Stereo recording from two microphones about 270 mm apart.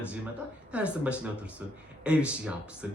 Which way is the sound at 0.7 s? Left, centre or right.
Centre.